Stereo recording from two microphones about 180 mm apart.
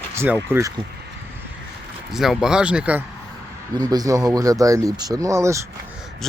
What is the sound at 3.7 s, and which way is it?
Speech, 20° right (ahead or behind).